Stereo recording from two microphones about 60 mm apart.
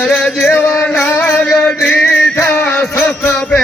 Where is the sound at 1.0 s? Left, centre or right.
Left.